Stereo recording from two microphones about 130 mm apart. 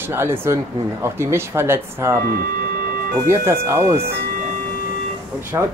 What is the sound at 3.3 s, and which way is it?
Speech, 20° right (ahead or behind).